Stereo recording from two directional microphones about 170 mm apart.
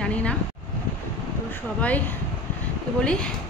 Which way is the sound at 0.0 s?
5° left (ahead or behind).